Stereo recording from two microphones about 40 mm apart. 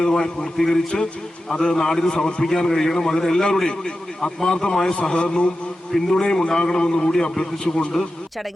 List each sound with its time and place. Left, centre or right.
0.0 s a man's voice: centre
5.9 s a man's voice: centre